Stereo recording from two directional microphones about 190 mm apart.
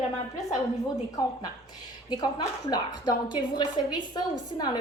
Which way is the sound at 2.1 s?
20° left (ahead or behind).